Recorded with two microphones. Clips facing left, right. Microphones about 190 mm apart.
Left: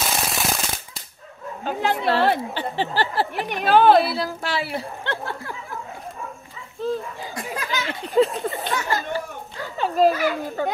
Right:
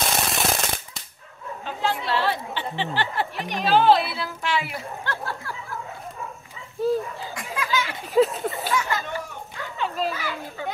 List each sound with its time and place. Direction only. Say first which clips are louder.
0.0 s a sound: even; centre (ahead or behind)
1.6 s a woman's voice: left 4 dB; 50° left (ahead or behind)
3.4 s a woman's voice: left 2 dB; 55° left (ahead or behind)
4.0 s speech: left 5 dB; 40° left (ahead or behind)
5.0 s speech: left 2 dB; 25° left (ahead or behind)
6.8 s speech: right 3 dB; 10° right (ahead or behind)
7.3 s a sound: right 1 dB; 35° left (ahead or behind)
8.1 s speech: left 1 dB; centre (ahead or behind)
8.7 s children playing: left 1 dB; 35° left (ahead or behind)
10.1 s a woman's voice: left 8 dB; 45° left (ahead or behind)